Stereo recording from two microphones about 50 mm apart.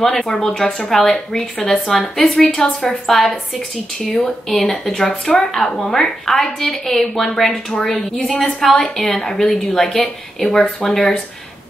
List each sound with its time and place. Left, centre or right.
0.0 s a woman's voice: centre
7.9 s a woman's voice: centre